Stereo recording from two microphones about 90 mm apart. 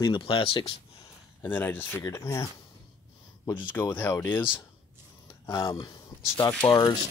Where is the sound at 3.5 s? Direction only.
20° left (ahead or behind).